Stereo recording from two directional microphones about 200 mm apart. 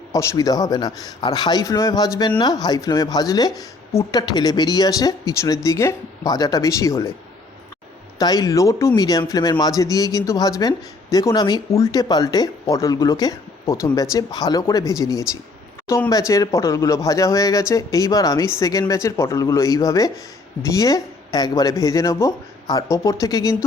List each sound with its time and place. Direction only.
0.1 s speech: 15° left (ahead or behind)
8.2 s speech: 20° left (ahead or behind)